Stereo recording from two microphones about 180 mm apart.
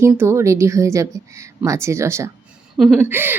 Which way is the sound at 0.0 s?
15° right (ahead or behind).